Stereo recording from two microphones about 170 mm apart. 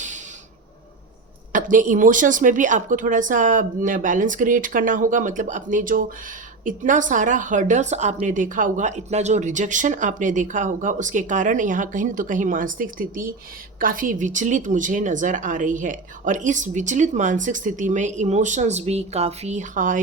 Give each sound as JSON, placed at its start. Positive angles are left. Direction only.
{"t": 1.5, "sound": "a woman's voice", "side_deg": -50}